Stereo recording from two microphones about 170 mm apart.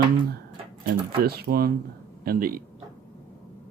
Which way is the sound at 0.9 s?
65° right (ahead or behind).